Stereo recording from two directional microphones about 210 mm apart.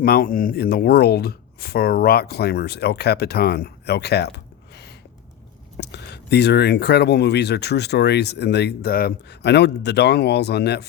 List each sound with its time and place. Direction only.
0.0 s speech: 45° left (ahead or behind)